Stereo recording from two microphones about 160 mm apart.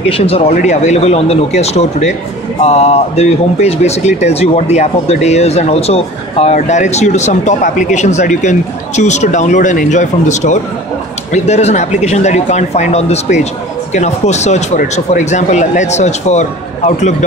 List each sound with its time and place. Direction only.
0.1 s speech: 35° left (ahead or behind)